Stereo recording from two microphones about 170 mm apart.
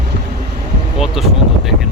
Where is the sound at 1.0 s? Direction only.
Centre (ahead or behind).